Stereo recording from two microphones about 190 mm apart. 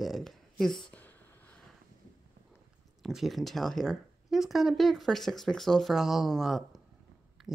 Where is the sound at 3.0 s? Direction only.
Centre (ahead or behind).